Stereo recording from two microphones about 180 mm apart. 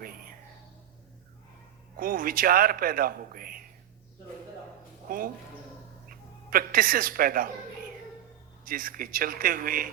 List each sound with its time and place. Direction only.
0.0 s a sound: 55° right (ahead or behind)
2.0 s a man's voice: 50° right (ahead or behind)
5.1 s a man's voice: 50° right (ahead or behind)
8.6 s a man's voice: 50° right (ahead or behind)